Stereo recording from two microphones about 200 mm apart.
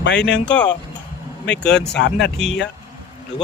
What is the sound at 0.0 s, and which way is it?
Speech, 60° left (ahead or behind).